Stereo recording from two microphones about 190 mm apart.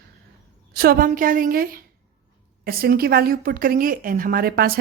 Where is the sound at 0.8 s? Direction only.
50° right (ahead or behind).